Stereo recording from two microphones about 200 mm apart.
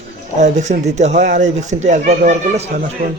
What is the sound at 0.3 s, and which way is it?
Speech, 35° right (ahead or behind).